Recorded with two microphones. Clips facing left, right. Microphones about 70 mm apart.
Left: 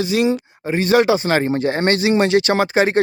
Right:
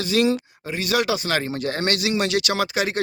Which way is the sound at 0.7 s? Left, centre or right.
Left.